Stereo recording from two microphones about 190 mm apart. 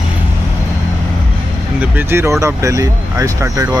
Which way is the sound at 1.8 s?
10° right (ahead or behind).